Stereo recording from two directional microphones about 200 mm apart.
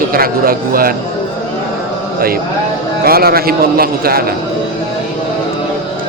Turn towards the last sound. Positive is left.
turn(degrees=-50)  # may be behind; listen again after turning